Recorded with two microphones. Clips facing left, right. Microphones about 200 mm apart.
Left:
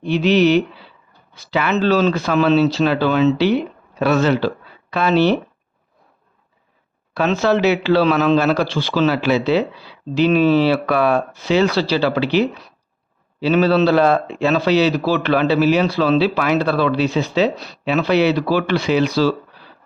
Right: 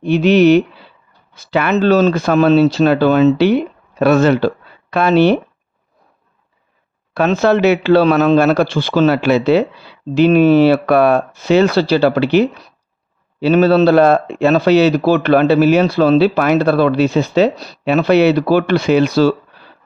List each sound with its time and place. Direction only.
0.0 s speech: 50° right (ahead or behind)
7.1 s speech: 50° right (ahead or behind)